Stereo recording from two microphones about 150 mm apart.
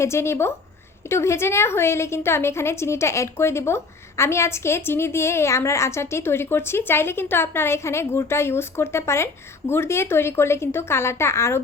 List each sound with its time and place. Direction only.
0.0 s a woman's voice: 20° left (ahead or behind)